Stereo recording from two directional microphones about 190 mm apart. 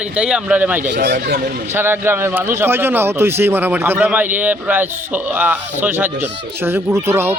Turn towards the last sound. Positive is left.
turn(degrees=-10)  # may be behind; listen again after turning